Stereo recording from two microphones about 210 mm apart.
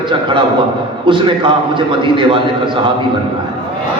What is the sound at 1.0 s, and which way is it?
A man's voice, 25° right (ahead or behind).